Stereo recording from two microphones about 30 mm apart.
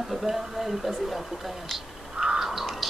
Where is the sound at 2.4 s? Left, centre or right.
Centre.